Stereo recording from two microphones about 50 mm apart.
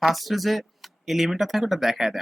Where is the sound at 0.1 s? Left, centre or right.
Centre.